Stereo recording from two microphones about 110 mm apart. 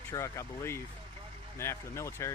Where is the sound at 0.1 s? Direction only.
25° left (ahead or behind).